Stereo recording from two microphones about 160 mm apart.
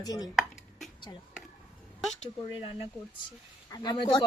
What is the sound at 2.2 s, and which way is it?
Speech, 35° left (ahead or behind).